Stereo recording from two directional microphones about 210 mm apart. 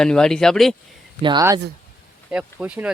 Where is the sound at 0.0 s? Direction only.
5° left (ahead or behind).